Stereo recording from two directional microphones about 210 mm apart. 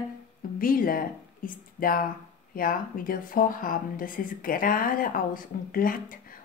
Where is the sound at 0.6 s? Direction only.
40° left (ahead or behind).